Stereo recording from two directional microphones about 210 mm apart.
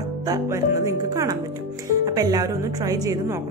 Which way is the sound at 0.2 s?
15° right (ahead or behind).